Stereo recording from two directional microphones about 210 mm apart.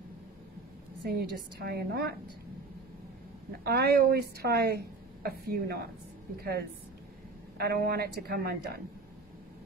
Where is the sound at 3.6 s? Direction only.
50° right (ahead or behind).